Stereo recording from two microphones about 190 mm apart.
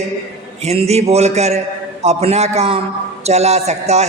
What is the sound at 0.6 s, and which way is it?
A man's voice, 35° right (ahead or behind).